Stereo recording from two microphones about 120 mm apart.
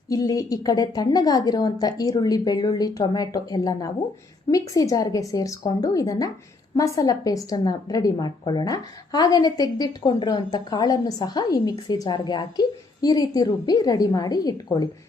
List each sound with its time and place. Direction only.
0.1 s a woman's voice: 30° left (ahead or behind)